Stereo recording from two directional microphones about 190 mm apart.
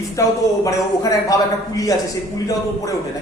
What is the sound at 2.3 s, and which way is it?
Speech, 20° left (ahead or behind).